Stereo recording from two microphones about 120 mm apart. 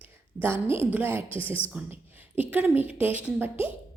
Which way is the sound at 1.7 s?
15° right (ahead or behind).